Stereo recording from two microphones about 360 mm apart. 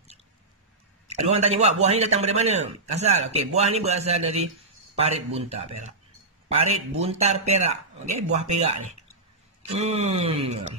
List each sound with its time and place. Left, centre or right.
1.0 s a man's voice: centre
7.0 s a man's voice: centre